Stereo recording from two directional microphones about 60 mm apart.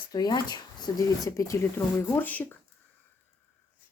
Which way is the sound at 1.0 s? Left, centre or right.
Left.